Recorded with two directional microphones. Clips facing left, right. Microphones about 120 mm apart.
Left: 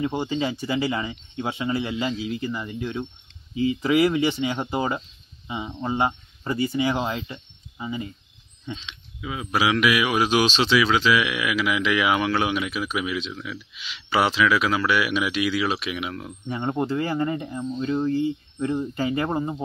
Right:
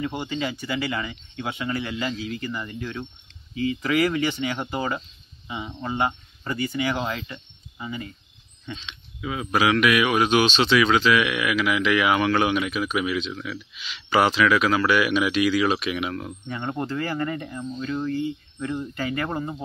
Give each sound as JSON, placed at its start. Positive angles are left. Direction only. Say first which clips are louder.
{"t": 0.0, "sound": "speech", "louder": "left 3 dB", "side_deg": 25}
{"t": 8.7, "sound": "speech", "louder": "even", "side_deg": 5}
{"t": 16.4, "sound": "speech", "louder": "left 5 dB", "side_deg": 20}